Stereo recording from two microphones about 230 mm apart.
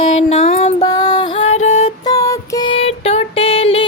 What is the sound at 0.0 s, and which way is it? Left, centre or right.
Music, left.